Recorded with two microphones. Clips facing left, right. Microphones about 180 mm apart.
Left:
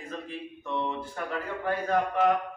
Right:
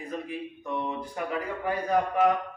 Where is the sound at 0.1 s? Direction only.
10° right (ahead or behind).